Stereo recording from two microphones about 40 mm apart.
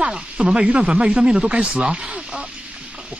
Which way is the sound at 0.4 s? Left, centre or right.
Right.